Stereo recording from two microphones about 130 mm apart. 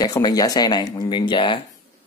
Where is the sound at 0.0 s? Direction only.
30° left (ahead or behind).